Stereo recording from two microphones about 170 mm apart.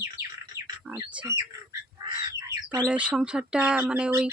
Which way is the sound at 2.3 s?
25° right (ahead or behind).